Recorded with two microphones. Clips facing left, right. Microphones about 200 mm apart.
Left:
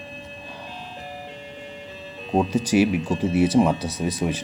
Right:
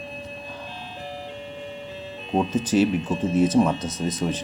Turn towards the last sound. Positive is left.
turn(degrees=10)  # may be behind; listen again after turning